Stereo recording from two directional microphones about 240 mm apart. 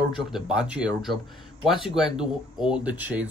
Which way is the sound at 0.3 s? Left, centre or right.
Centre.